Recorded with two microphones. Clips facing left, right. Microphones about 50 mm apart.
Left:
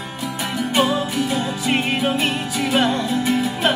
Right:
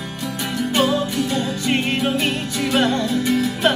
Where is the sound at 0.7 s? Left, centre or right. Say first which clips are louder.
Even; centre.